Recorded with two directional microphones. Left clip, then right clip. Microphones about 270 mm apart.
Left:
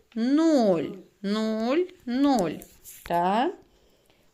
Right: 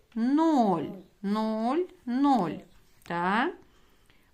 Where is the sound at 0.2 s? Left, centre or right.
Centre.